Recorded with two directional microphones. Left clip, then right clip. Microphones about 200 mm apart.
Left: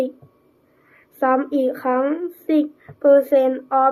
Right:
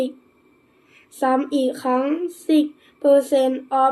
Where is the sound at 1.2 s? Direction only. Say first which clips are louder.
Left 1 dB; 10° right (ahead or behind).